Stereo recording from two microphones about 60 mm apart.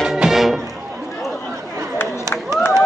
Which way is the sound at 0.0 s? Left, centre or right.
Centre.